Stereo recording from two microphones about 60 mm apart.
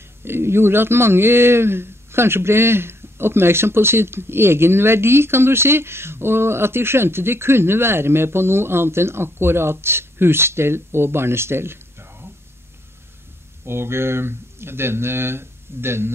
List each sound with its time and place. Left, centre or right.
0.2 s speech: right
13.7 s speech: right